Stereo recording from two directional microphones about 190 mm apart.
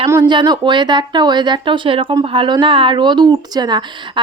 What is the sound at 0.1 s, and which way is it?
Speech, 25° right (ahead or behind).